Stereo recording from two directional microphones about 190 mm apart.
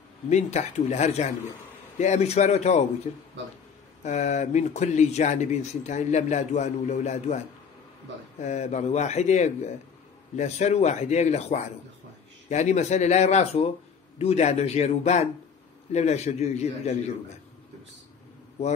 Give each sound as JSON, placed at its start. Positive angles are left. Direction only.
{"t": 0.3, "sound": "speech", "side_deg": 35}